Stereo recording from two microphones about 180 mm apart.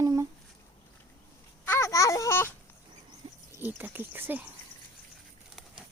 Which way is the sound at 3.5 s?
10° right (ahead or behind).